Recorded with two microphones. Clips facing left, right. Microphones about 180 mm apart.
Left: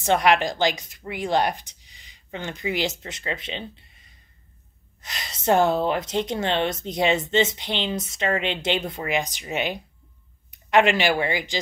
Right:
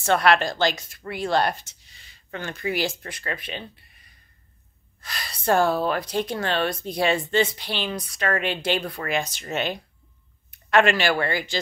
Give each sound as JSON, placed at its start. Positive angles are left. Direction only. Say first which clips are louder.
{"t": 0.0, "sound": "a woman's voice", "louder": "even", "side_deg": 15}